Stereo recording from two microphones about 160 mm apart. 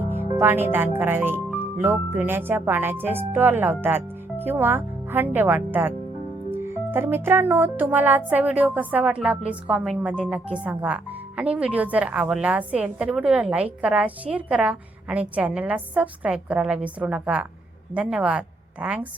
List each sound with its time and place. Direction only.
0.1 s speech: 15° right (ahead or behind)